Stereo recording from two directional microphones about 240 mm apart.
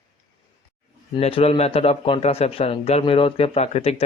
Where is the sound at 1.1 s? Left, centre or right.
Left.